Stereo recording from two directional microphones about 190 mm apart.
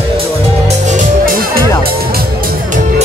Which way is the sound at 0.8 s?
50° right (ahead or behind).